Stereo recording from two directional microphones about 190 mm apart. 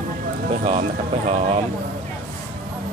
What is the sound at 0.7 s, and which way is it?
Speech, 35° right (ahead or behind).